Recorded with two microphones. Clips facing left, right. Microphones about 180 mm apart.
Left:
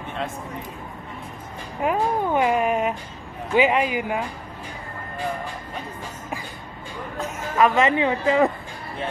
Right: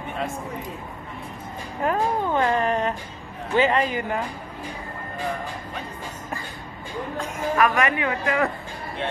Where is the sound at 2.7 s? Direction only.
Centre (ahead or behind).